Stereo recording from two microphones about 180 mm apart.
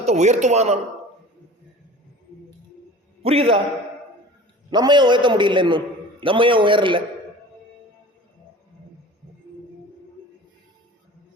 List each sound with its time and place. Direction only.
0.0 s a man's voice: 40° right (ahead or behind)
3.2 s a man's voice: 30° right (ahead or behind)
4.7 s a man's voice: 25° right (ahead or behind)